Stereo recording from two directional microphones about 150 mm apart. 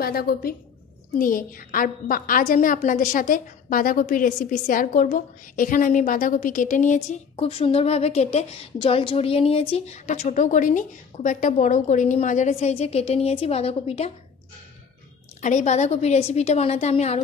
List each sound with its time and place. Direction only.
0.0 s a woman's voice: 90° left
1.1 s a woman's voice: 65° left (ahead or behind)
7.4 s a woman's voice: 40° left (ahead or behind)
15.4 s a woman's voice: 50° left (ahead or behind)